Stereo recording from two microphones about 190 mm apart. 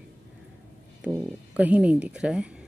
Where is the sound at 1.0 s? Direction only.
10° right (ahead or behind).